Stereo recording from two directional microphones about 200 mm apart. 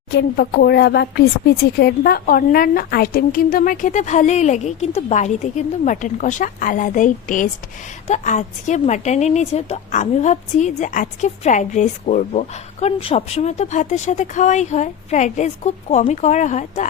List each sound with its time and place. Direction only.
0.1 s a woman's voice: 55° left (ahead or behind); by 16.8 s 35° left (ahead or behind)